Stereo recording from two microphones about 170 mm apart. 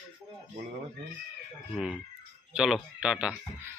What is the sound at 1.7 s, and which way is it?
Speech, 5° right (ahead or behind).